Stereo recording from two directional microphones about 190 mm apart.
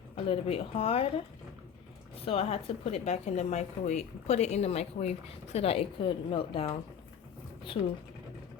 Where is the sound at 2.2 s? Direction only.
30° left (ahead or behind).